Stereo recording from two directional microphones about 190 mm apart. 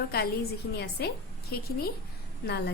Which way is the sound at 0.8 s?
55° left (ahead or behind).